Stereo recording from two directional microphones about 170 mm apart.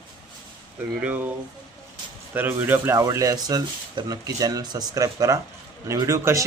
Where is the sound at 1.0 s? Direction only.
10° right (ahead or behind).